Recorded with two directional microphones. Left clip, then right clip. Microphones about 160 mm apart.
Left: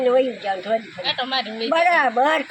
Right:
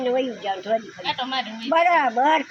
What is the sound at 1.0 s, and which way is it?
Speech, 50° left (ahead or behind).